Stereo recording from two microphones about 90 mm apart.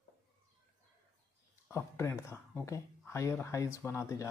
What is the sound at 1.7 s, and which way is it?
Speech, 30° left (ahead or behind).